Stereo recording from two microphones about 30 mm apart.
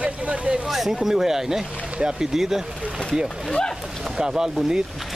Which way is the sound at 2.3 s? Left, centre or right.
Centre.